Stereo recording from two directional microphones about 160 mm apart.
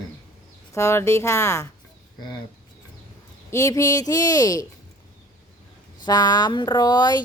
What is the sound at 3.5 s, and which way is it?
A woman's voice, 20° left (ahead or behind).